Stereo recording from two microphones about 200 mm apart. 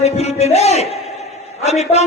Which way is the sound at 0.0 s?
35° left (ahead or behind).